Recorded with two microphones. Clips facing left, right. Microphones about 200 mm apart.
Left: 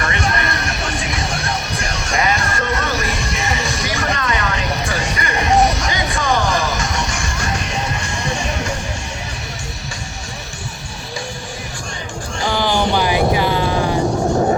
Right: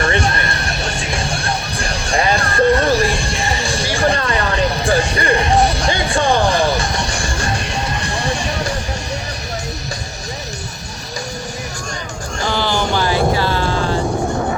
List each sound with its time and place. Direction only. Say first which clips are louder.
0.0 s music: right 3 dB; 30° right (ahead or behind)
12.5 s vehicle: left 2 dB; 15° left (ahead or behind)